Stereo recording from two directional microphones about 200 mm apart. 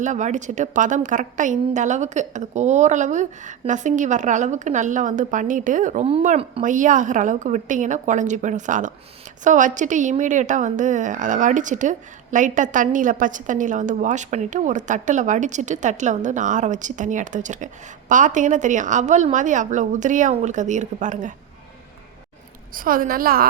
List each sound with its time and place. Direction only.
0.0 s a woman's voice: 40° right (ahead or behind)
22.7 s a woman's voice: 45° right (ahead or behind)